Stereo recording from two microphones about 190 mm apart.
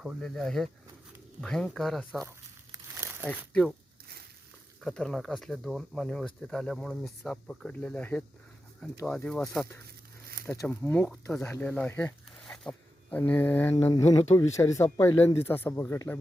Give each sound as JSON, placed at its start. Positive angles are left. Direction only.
{"t": 0.0, "sound": "speech", "side_deg": 0}
{"t": 2.7, "sound": "crumpling", "side_deg": -15}
{"t": 3.2, "sound": "speech", "side_deg": 5}
{"t": 4.8, "sound": "speech", "side_deg": 0}